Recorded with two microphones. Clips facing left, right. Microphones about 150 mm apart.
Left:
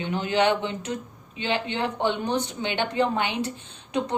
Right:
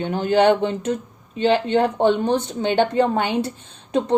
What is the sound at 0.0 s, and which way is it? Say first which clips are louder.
Speech: right 6 dB; 45° right (ahead or behind).